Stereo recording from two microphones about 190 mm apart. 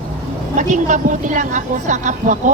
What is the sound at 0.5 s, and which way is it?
A woman's voice, 40° right (ahead or behind).